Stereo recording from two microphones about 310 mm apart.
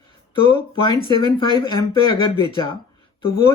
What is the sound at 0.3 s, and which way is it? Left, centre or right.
Speech, centre.